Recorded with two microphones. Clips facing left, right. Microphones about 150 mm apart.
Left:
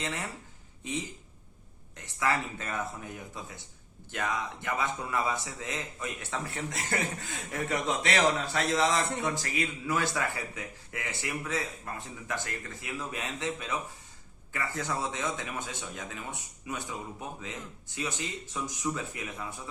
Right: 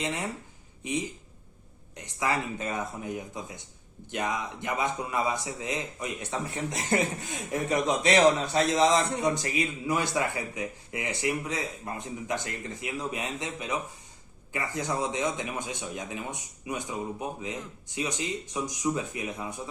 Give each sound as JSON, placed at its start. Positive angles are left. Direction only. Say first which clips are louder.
{"t": 0.0, "sound": "speech", "louder": "right 4 dB", "side_deg": -20}